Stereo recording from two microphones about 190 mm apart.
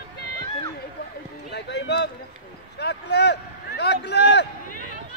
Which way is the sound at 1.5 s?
65° left (ahead or behind).